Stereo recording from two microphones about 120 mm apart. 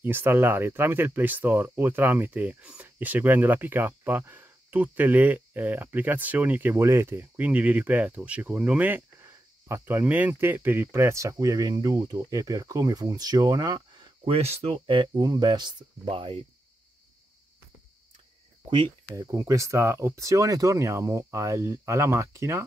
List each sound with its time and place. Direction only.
0.0 s speech: 15° right (ahead or behind); by 13.8 s 35° right (ahead or behind)
14.2 s speech: 60° right (ahead or behind)
14.9 s speech: 40° right (ahead or behind)
16.1 s speech: 55° right (ahead or behind)
18.7 s speech: 40° right (ahead or behind)
19.1 s speech: 30° right (ahead or behind)